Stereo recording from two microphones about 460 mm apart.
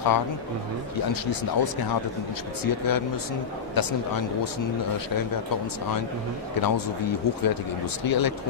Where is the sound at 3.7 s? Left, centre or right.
Left.